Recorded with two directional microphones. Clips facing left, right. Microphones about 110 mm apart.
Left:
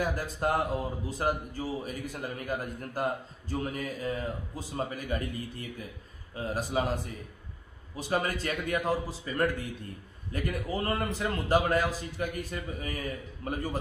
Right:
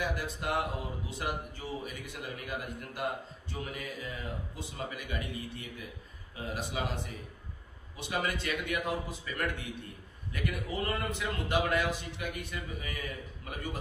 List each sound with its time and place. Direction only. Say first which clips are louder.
0.0 s a man's voice: left 5 dB; 40° left (ahead or behind)
8.0 s a man's voice: left 4 dB; 40° left (ahead or behind)